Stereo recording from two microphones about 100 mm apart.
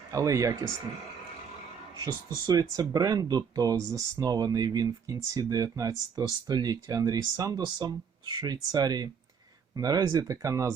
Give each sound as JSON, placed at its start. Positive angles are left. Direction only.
{"t": 0.1, "sound": "speech", "side_deg": -35}
{"t": 2.5, "sound": "speech", "side_deg": -35}